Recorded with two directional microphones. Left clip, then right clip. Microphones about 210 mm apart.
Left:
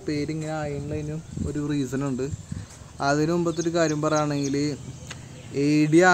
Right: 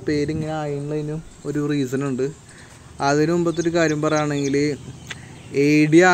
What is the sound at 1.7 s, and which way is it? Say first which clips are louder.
Speech: right 3 dB; 10° right (ahead or behind).